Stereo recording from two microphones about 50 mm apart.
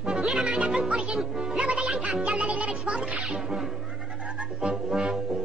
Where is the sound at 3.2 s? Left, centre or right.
Centre.